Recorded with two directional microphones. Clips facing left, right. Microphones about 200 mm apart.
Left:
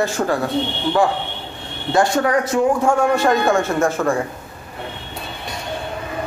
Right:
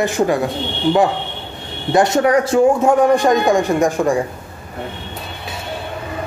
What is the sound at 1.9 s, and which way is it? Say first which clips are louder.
A man's voice: right 3 dB; 20° right (ahead or behind).